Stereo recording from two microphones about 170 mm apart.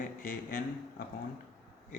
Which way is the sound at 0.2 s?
55° left (ahead or behind).